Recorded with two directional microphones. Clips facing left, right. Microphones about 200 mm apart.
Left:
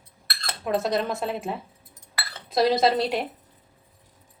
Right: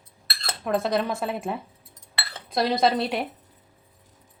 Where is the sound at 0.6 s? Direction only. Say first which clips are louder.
Even; centre (ahead or behind).